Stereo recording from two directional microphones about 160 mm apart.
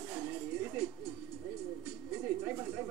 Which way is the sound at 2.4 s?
15° right (ahead or behind).